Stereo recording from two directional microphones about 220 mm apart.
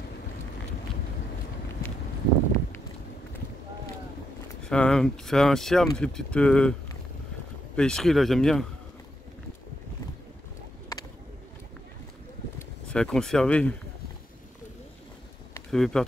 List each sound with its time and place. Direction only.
4.6 s speech: 5° left (ahead or behind)
7.7 s speech: 5° left (ahead or behind)
12.5 s speech: 5° left (ahead or behind)
15.5 s a sound: centre (ahead or behind)